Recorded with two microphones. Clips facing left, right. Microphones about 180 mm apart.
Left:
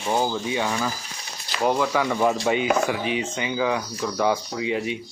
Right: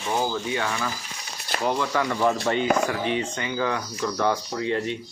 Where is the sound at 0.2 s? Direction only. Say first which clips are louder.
Left 2 dB; 20° left (ahead or behind).